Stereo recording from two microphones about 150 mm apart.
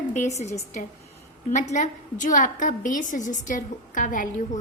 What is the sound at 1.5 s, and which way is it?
A woman's voice, 50° left (ahead or behind).